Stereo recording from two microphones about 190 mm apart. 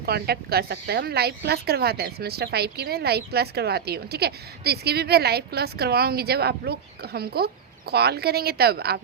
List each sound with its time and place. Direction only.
0.0 s a woman's voice: 55° right (ahead or behind)